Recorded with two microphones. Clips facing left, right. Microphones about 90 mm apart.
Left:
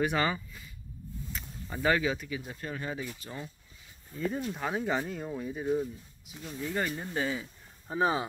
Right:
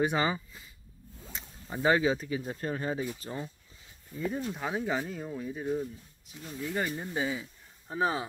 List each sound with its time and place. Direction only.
0.0 s speech: 20° right (ahead or behind)
4.5 s speech: centre (ahead or behind)
6.4 s speech: 5° right (ahead or behind)